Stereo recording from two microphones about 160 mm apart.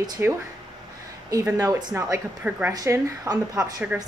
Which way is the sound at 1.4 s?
20° right (ahead or behind).